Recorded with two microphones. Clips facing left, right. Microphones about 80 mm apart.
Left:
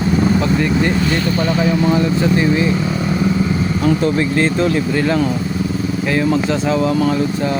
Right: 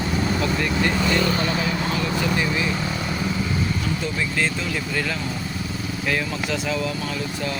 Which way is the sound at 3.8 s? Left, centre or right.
Left.